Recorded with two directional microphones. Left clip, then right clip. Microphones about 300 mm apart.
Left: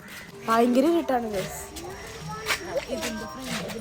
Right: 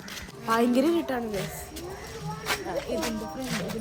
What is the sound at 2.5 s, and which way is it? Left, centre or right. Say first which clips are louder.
Snake: left 1 dB; centre.